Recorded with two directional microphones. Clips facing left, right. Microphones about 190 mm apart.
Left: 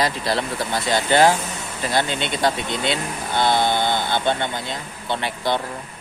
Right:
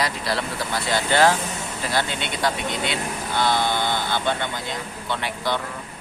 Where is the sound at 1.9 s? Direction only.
25° left (ahead or behind).